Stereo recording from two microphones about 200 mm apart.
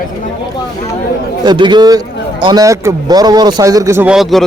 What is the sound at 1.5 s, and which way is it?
A man's voice, 20° right (ahead or behind).